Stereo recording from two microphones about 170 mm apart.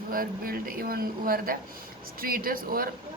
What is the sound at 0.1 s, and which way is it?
A woman's voice, 60° right (ahead or behind).